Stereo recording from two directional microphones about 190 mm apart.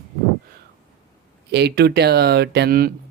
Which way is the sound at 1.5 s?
60° right (ahead or behind).